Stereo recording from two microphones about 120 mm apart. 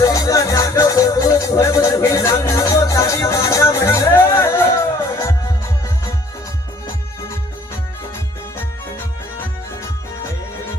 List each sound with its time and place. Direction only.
0.0 s music: 30° left (ahead or behind)